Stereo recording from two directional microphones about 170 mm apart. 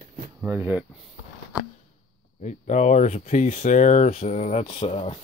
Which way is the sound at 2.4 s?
45° left (ahead or behind).